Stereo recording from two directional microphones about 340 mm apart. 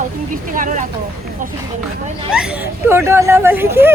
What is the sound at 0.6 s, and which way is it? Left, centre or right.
Speech, right.